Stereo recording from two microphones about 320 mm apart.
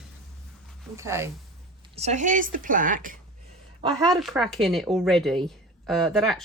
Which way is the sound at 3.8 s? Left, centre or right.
Centre.